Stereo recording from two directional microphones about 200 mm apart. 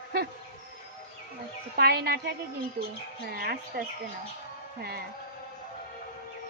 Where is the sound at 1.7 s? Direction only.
50° right (ahead or behind).